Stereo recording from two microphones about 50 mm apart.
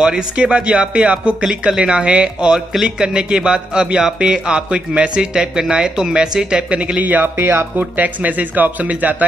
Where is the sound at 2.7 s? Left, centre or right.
Centre.